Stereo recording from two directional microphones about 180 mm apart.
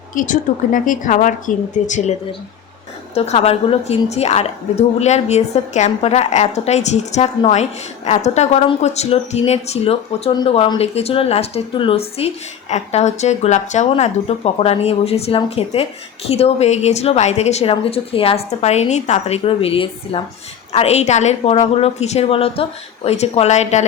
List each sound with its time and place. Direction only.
0.1 s a woman's voice: 45° left (ahead or behind)
3.2 s a woman's voice: 35° left (ahead or behind)